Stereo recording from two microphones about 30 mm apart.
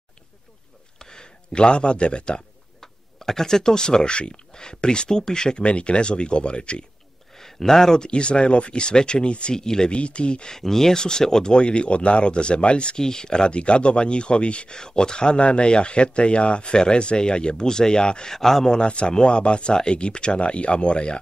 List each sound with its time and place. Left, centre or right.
0.9 s a sound: left
2.8 s speech: centre
5.6 s speech: left
7.3 s speech: centre
8.0 s speech: left
9.6 s speech: left
9.8 s speech: left
10.5 s speech: centre
11.5 s speech: left
13.0 s speech: left
13.5 s speech: left
14.8 s speech: left
18.3 s speech: centre
18.7 s speech: left